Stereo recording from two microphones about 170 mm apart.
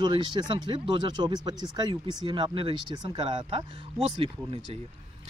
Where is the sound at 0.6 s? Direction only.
25° right (ahead or behind).